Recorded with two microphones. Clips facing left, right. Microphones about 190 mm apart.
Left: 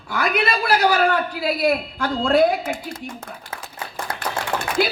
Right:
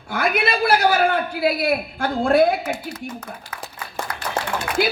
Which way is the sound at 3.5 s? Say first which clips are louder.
Right 1 dB; 25° left (ahead or behind).